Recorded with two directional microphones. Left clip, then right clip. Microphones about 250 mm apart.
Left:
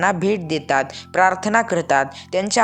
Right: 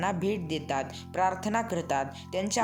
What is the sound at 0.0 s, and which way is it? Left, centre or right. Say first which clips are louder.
A woman's voice: left 11 dB; centre.